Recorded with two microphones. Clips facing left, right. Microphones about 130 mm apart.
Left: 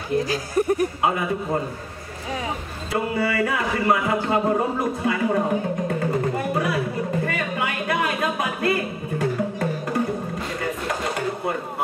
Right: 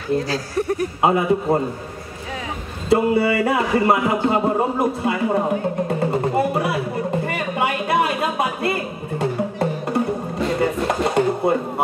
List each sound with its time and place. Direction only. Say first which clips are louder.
0.3 s speech: left 1 dB; 15° left (ahead or behind)
1.0 s speech: right 6 dB; 30° right (ahead or behind)
2.9 s speech: right 7 dB; 25° right (ahead or behind)
5.9 s a sound: right 3 dB; 25° right (ahead or behind)
10.6 s chopping: right 6 dB; 30° right (ahead or behind)